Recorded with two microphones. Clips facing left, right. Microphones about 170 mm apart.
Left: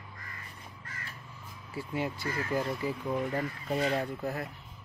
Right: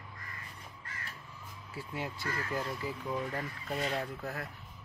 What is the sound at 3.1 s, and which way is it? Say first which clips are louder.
Speech: left 4 dB; 15° left (ahead or behind).